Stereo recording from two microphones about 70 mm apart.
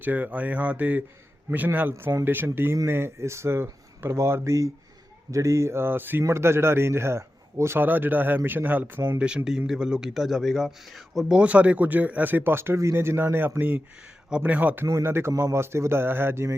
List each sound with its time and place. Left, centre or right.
0.0 s a man's voice: right
9.1 s speech: centre
11.3 s speech: centre
15.0 s a man's voice: right